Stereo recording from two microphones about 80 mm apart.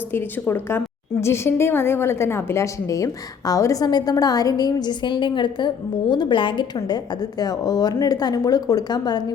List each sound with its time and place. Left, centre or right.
0.1 s a woman's voice: left
3.8 s a woman's voice: left
6.7 s a woman's voice: left